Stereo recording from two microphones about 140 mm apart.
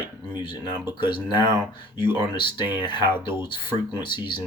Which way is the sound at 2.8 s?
35° left (ahead or behind).